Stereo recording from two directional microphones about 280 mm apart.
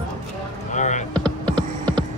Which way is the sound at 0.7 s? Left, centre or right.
Left.